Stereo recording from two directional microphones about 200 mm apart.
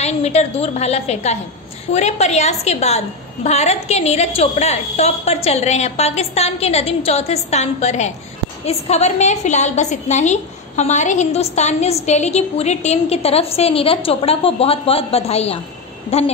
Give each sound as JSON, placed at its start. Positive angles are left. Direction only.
{"t": 0.0, "sound": "a woman's voice", "side_deg": 30}